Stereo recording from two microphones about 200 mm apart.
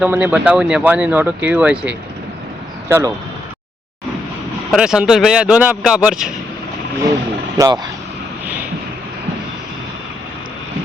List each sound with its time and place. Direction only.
0.0 s speech: 5° right (ahead or behind)
4.7 s speech: 5° right (ahead or behind)
7.6 s speech: 20° right (ahead or behind)